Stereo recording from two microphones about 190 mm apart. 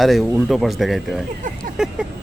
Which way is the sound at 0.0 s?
Centre (ahead or behind).